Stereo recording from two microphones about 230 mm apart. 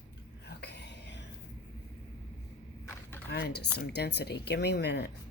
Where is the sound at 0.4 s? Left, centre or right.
Left.